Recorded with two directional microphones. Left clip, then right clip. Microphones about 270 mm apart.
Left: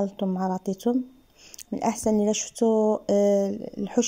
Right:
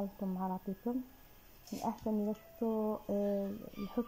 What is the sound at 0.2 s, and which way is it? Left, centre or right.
A woman's voice, left.